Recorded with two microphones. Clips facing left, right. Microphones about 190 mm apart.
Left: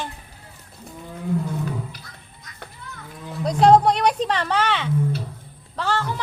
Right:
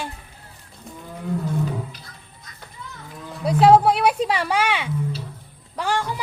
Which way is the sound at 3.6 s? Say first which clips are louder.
Even; 5° right (ahead or behind).